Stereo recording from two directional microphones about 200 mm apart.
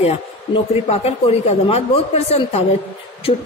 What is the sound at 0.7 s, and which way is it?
A woman's voice, 30° left (ahead or behind).